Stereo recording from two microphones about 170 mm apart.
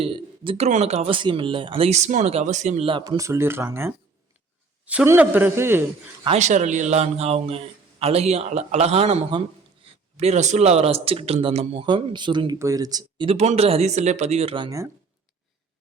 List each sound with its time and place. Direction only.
0.0 s a man's voice: 35° right (ahead or behind)
3.0 s a man's voice: 20° right (ahead or behind)
6.2 s a man's voice: 40° right (ahead or behind); by 14.8 s 25° right (ahead or behind)